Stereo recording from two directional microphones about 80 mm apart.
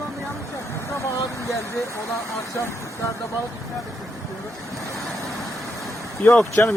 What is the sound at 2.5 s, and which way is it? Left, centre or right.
Speech, left.